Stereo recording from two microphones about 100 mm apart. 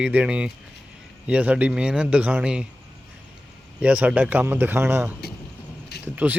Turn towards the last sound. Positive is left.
turn(degrees=-15)  # may be behind; listen again after turning